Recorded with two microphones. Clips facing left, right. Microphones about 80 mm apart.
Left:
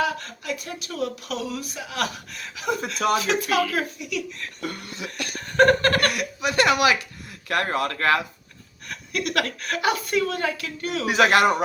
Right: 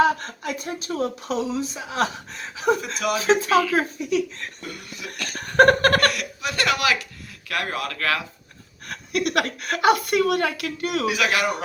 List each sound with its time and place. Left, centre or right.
0.0 s speech: right
2.8 s speech: left
3.2 s speech: right
4.9 s a man's voice: left
5.4 s a woman's voice: right
6.1 s a woman's voice: centre
7.4 s speech: left
8.9 s a woman's voice: right
11.0 s a man's voice: left